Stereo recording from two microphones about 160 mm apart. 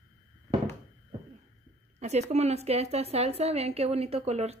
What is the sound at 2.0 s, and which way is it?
A woman's voice, 45° right (ahead or behind).